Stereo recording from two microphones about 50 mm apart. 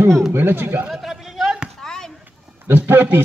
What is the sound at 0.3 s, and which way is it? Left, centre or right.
Speech, right.